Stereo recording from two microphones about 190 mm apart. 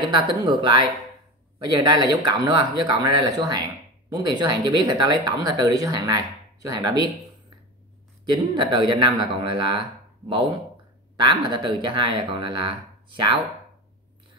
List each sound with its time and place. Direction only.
0.0 s speech: 25° right (ahead or behind)
8.3 s speech: 25° right (ahead or behind)